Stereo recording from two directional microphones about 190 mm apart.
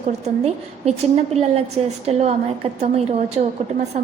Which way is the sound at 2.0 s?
35° right (ahead or behind).